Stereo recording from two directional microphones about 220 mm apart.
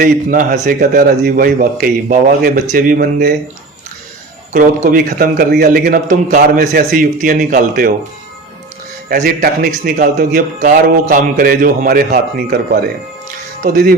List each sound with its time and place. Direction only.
0.0 s a man's voice: 35° right (ahead or behind)
4.5 s a man's voice: 35° right (ahead or behind)
9.0 s a man's voice: 40° right (ahead or behind)